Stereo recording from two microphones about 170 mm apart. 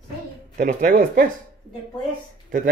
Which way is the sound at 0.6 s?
50° right (ahead or behind).